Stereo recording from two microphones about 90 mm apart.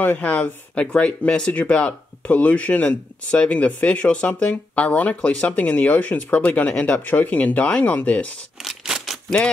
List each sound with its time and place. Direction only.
0.0 s speech: 15° left (ahead or behind)
8.5 s scissors: 5° right (ahead or behind)